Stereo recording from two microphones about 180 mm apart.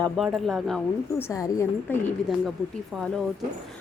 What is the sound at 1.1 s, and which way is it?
Speech, 15° left (ahead or behind).